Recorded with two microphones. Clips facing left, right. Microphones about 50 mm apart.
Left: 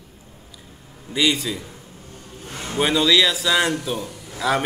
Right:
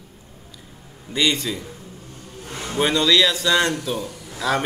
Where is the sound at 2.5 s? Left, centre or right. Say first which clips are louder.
Right 1 dB; right.